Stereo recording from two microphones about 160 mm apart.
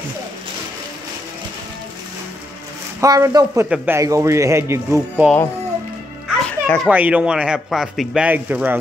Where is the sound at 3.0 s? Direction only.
20° right (ahead or behind).